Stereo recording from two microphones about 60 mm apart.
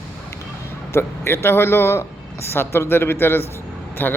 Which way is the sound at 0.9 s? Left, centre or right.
Left.